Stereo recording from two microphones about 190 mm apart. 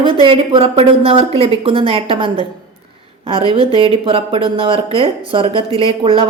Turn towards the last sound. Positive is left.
turn(degrees=-30)  # may be behind; listen again after turning